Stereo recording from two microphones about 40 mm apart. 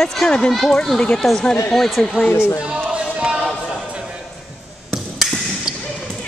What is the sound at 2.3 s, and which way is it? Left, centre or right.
Speech, left.